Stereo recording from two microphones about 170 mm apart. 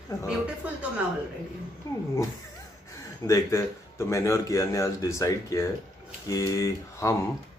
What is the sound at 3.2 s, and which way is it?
Speech, 20° left (ahead or behind).